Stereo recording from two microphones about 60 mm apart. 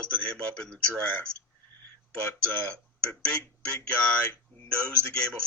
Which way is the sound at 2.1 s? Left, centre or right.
Left.